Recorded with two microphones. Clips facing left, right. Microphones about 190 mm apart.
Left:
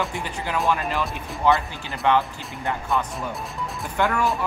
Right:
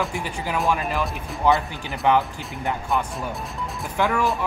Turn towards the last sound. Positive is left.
turn(degrees=0)  # may be behind; listen again after turning